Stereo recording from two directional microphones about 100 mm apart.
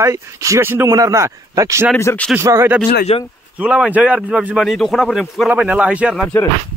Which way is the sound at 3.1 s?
85° left.